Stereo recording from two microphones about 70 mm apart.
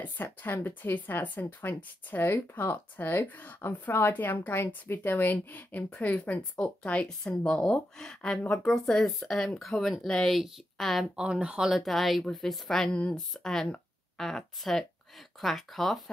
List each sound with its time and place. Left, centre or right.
0.0 s a woman's voice: left; by 11.1 s centre
11.1 s speech: centre
11.8 s speech: centre